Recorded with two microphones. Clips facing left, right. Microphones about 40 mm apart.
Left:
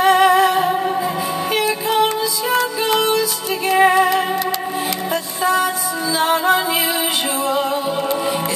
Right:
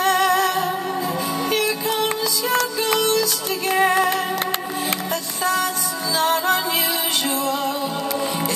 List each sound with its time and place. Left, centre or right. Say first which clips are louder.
0.0 s music: left 5 dB; centre
5.1 s music: left 6 dB; centre